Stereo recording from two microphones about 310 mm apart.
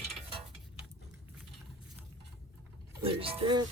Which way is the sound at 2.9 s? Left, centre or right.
Centre.